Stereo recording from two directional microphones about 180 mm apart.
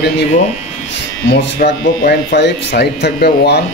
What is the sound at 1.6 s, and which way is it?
Speech, 70° left (ahead or behind).